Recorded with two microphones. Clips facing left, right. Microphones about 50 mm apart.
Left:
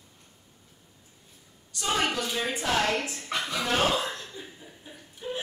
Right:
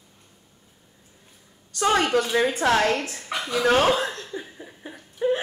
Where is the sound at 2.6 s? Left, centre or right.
Right.